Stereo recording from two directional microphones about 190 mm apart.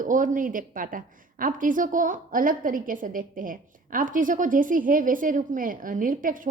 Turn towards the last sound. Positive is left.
turn(degrees=-45)  # may be behind; listen again after turning